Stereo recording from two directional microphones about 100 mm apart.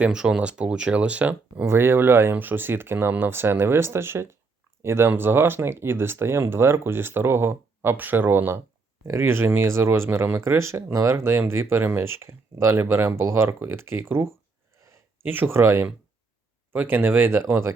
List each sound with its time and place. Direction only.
0.0 s speech: 10° right (ahead or behind)
1.6 s speech: 25° right (ahead or behind)